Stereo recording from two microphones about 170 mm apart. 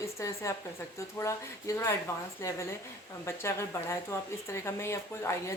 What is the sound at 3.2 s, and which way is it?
Speech, 15° left (ahead or behind).